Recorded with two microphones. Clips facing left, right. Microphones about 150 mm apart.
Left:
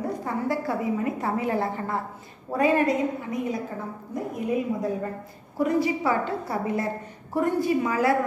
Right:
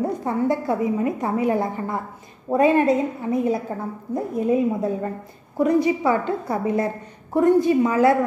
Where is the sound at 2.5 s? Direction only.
25° right (ahead or behind).